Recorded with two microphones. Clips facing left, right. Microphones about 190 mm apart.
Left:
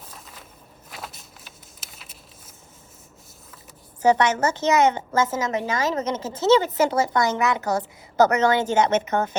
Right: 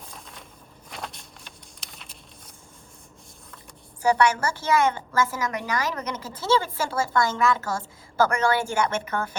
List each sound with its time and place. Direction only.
0.0 s walk: 5° left (ahead or behind)
0.9 s a sound: 5° left (ahead or behind)
4.0 s a woman's voice: 25° left (ahead or behind)